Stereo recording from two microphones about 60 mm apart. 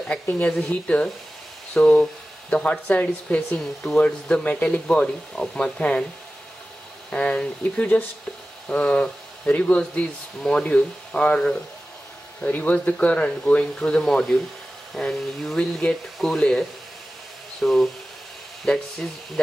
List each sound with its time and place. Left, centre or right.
0.3 s speech: left
7.1 s speech: centre